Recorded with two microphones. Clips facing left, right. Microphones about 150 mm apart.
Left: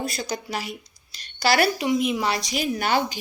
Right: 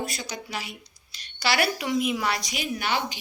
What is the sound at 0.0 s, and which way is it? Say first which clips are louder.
A woman's voice: left 4 dB; 35° left (ahead or behind).